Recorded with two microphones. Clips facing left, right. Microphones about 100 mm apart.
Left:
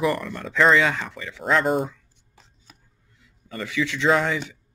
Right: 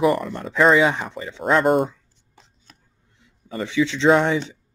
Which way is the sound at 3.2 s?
25° right (ahead or behind).